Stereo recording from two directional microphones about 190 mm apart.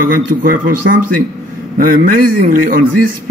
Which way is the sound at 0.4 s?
50° right (ahead or behind).